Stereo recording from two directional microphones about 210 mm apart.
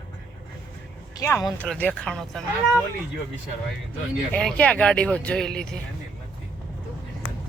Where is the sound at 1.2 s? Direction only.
15° left (ahead or behind).